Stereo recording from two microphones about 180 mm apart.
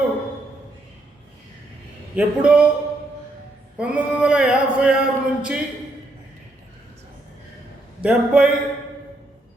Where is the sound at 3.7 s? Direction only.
5° right (ahead or behind).